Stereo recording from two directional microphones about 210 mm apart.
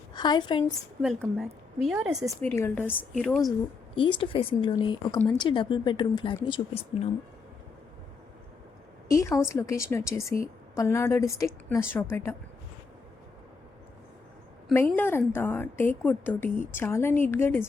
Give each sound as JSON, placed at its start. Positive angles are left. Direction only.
{"t": 0.1, "sound": "a woman's voice", "side_deg": 20}
{"t": 1.8, "sound": "a woman's voice", "side_deg": 0}
{"t": 2.5, "sound": "a woman's voice", "side_deg": 10}
{"t": 3.9, "sound": "a woman's voice", "side_deg": 25}
{"t": 9.0, "sound": "a woman's voice", "side_deg": 15}
{"t": 14.7, "sound": "a woman's voice", "side_deg": 10}